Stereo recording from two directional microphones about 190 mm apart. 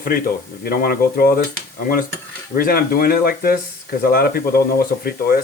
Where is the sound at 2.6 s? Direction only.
50° left (ahead or behind).